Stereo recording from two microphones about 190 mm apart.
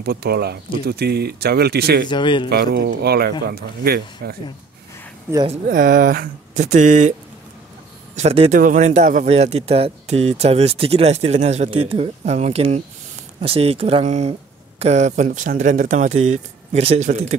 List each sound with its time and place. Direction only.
0.0 s speech: 55° right (ahead or behind)
2.0 s a man's voice: 25° left (ahead or behind)
2.5 s speech: 55° right (ahead or behind)
5.7 s speech: 45° right (ahead or behind)
8.2 s speech: 35° right (ahead or behind)